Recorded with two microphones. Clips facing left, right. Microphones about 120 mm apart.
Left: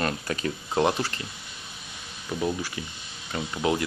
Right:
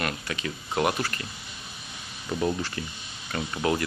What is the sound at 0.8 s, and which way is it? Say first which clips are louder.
Speech: left 2 dB; 25° left (ahead or behind).